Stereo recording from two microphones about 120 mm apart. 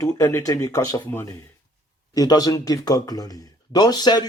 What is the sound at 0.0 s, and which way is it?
A man's voice, 25° left (ahead or behind).